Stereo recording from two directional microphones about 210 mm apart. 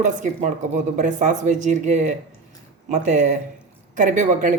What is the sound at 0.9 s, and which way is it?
A woman's voice, 35° right (ahead or behind).